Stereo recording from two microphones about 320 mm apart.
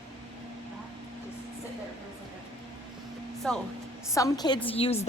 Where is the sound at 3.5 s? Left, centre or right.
Centre.